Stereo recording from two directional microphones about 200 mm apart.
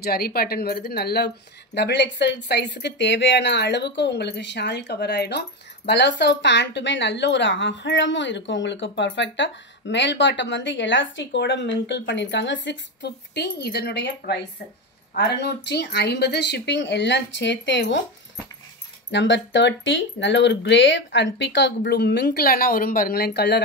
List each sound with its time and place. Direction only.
0.0 s speech: 50° left (ahead or behind)
19.1 s speech: 60° left (ahead or behind)